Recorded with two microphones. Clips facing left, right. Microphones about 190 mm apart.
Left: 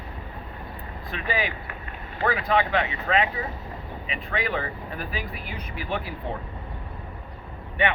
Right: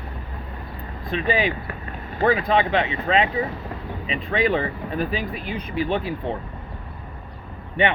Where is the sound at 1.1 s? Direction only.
25° right (ahead or behind).